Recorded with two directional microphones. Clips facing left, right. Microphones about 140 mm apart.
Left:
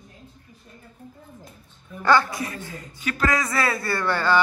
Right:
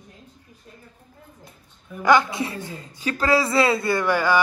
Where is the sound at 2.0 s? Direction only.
15° right (ahead or behind).